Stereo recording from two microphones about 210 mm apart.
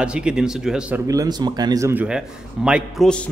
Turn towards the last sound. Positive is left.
turn(degrees=5)  # may be behind; listen again after turning